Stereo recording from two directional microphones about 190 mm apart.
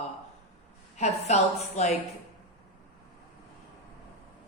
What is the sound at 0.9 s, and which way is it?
Speech, 35° left (ahead or behind).